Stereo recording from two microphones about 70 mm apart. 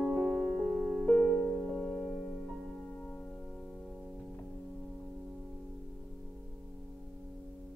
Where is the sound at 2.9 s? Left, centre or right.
Centre.